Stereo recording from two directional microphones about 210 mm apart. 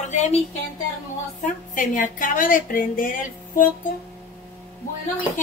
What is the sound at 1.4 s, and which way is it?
A woman's voice, 40° left (ahead or behind).